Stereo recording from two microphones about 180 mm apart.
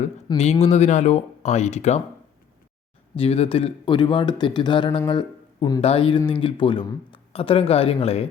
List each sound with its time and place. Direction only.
0.3 s speech: 20° left (ahead or behind)
0.6 s speech: 40° left (ahead or behind)
3.2 s speech: 35° left (ahead or behind)